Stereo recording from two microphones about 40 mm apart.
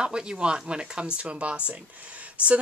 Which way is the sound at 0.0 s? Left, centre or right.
Right.